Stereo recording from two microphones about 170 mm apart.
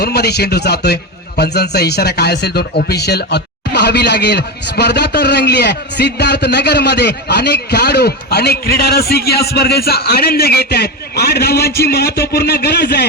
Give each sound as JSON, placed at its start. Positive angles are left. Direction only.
{"t": 0.0, "sound": "a man's voice", "side_deg": 70}